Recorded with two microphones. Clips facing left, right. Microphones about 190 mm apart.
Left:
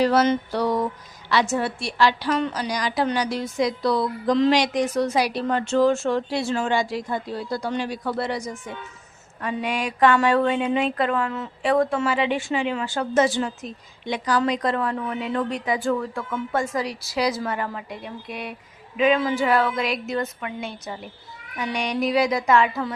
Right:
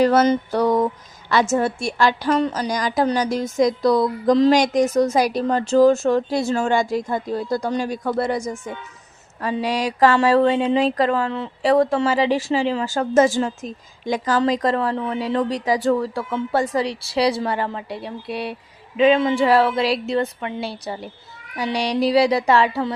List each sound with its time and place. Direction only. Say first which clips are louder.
0.0 s a woman's voice: right 3 dB; 50° right (ahead or behind)
9.4 s speech: right 4 dB; 35° right (ahead or behind)